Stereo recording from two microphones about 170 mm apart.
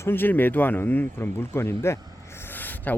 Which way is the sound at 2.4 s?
10° left (ahead or behind).